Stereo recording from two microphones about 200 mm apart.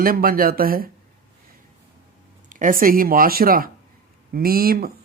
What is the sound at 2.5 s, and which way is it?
Speech, 40° right (ahead or behind).